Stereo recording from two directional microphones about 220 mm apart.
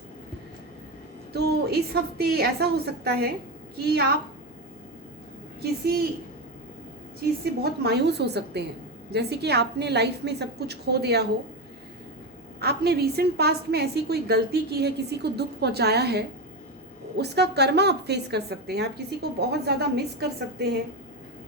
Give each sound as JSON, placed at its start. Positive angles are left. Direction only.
{"t": 1.3, "sound": "a woman's voice", "side_deg": -45}
{"t": 5.8, "sound": "a woman's voice", "side_deg": -45}
{"t": 7.6, "sound": "a woman's voice", "side_deg": -45}
{"t": 12.5, "sound": "a woman's voice", "side_deg": -45}